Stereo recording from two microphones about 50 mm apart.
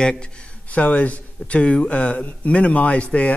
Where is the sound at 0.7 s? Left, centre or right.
Left.